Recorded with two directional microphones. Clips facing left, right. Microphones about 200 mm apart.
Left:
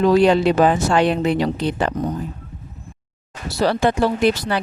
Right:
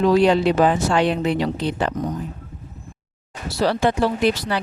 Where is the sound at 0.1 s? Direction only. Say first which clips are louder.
Left 2 dB; 50° left (ahead or behind).